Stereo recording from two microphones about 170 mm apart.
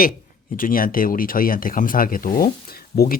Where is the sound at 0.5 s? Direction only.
55° left (ahead or behind).